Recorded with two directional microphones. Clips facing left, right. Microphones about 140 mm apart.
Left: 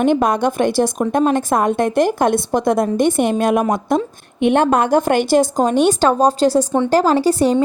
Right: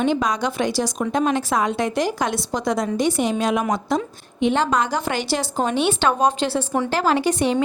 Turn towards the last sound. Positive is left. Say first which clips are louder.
# left 5 dB
turn(degrees=35)  # may be behind; listen again after turning